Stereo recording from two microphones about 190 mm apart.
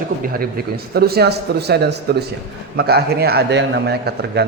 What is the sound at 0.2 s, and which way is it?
A man's voice, 50° right (ahead or behind).